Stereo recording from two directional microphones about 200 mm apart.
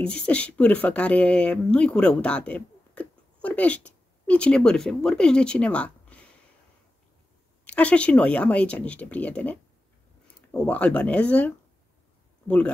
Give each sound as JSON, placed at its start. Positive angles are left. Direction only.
{"t": 0.0, "sound": "speech", "side_deg": 5}
{"t": 7.6, "sound": "speech", "side_deg": 5}